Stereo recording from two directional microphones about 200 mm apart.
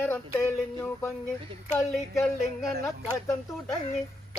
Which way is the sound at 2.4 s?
50° right (ahead or behind).